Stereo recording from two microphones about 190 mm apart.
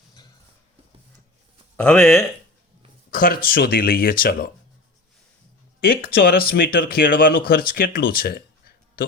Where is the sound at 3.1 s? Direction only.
50° left (ahead or behind).